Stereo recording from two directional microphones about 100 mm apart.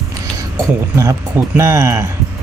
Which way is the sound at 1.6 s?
30° right (ahead or behind).